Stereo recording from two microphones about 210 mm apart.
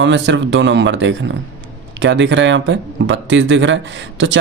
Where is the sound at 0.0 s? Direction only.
60° right (ahead or behind).